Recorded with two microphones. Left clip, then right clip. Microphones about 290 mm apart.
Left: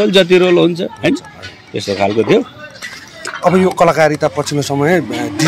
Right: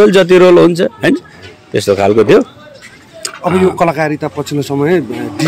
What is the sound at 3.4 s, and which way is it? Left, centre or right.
Speech, centre.